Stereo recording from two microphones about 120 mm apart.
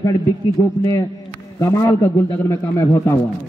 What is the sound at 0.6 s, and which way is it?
A man's voice, 30° left (ahead or behind).